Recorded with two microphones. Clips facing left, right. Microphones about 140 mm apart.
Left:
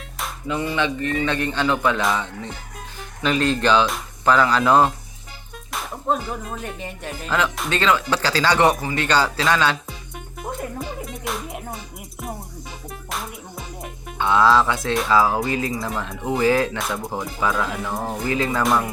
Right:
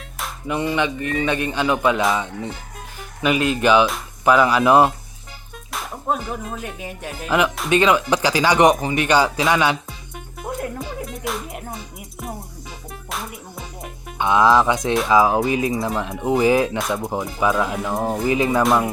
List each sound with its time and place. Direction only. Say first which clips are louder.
0.4 s speech: right 2 dB; 20° right (ahead or behind)
5.7 s speech: left 1 dB; centre (ahead or behind)
10.4 s music: right 2 dB; centre (ahead or behind)
14.2 s speech: right 1 dB; 15° right (ahead or behind)